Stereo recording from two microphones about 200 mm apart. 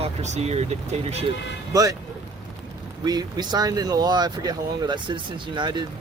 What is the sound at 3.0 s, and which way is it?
Speech, 20° right (ahead or behind).